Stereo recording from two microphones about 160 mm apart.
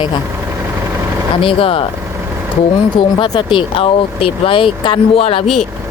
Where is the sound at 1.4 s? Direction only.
35° left (ahead or behind).